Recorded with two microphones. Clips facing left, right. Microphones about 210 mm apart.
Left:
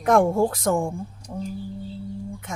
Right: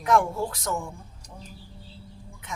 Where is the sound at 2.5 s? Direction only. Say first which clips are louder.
Left 1 dB; 45° left (ahead or behind).